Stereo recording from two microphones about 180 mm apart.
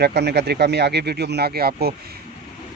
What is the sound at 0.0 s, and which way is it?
Speech, 65° right (ahead or behind).